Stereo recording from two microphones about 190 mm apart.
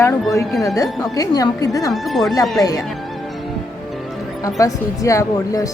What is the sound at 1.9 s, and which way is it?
Speech, centre (ahead or behind).